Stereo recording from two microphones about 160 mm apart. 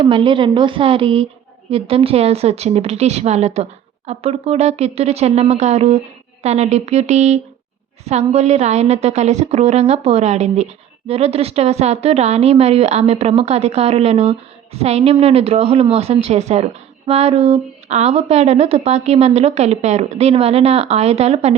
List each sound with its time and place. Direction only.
0.0 s a woman's voice: 30° right (ahead or behind)